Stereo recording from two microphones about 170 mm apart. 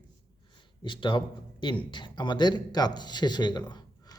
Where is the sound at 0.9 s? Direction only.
30° left (ahead or behind).